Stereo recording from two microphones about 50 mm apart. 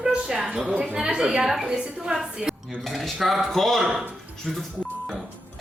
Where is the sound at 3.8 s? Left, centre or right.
Centre.